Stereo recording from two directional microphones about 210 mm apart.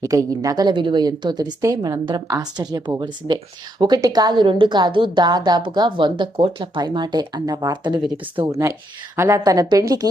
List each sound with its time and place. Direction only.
0.0 s a woman's voice: 15° right (ahead or behind)